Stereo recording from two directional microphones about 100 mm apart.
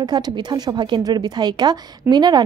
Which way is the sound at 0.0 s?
45° right (ahead or behind).